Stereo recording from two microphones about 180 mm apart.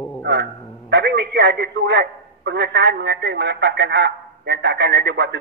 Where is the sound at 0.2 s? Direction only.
70° right (ahead or behind).